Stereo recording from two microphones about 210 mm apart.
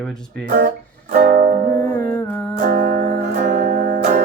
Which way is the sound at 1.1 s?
40° right (ahead or behind).